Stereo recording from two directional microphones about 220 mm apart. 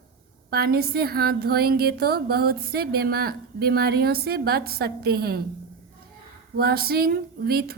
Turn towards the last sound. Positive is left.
turn(degrees=-45)  # may be behind; listen again after turning